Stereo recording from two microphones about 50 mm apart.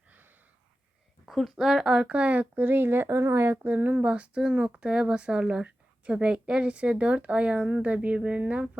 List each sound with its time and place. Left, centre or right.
1.5 s speech: centre; by 3.2 s right
3.2 s speech: right
3.4 s speech: right
4.0 s speech: right